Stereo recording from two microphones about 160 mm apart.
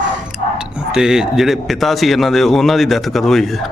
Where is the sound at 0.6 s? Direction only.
5° right (ahead or behind).